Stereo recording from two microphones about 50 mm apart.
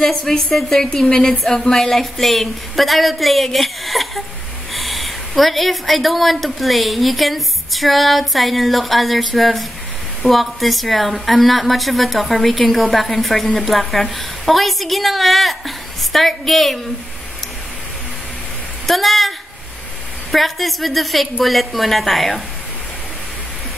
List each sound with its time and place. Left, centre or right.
0.0 s a woman's voice: centre
18.9 s a woman's voice: centre